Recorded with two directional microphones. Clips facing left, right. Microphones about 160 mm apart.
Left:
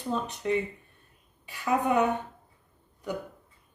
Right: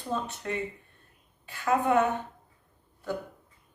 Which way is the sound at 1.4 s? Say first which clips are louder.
Right 1 dB; 15° left (ahead or behind).